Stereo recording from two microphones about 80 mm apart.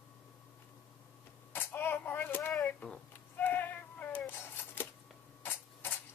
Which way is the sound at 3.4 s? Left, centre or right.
Left.